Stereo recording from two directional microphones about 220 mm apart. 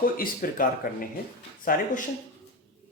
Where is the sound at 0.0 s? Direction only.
40° left (ahead or behind).